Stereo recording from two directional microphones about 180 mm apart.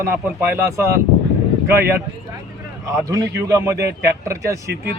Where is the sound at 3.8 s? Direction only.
65° right (ahead or behind).